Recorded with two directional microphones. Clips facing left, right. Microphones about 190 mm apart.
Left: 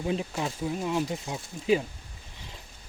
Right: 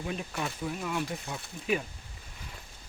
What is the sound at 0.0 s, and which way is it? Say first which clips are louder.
Speech: left 5 dB; 25° left (ahead or behind).